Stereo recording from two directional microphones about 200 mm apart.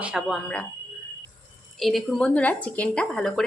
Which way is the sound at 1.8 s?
Centre (ahead or behind).